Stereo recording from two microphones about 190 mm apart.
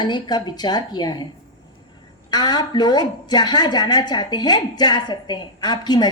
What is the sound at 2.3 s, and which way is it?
A woman's voice, 20° left (ahead or behind).